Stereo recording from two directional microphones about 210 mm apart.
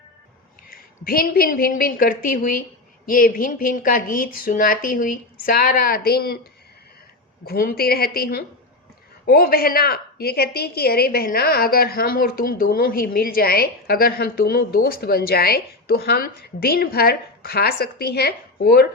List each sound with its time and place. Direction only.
0.7 s a woman's voice: 45° left (ahead or behind)
7.4 s a woman's voice: 45° left (ahead or behind)